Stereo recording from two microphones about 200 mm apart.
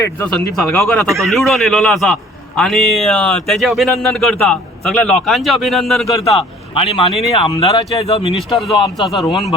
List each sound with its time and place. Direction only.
0.0 s speech: 10° left (ahead or behind)
6.7 s speech: 25° left (ahead or behind)
8.5 s speech: centre (ahead or behind)
9.2 s speech: 15° left (ahead or behind)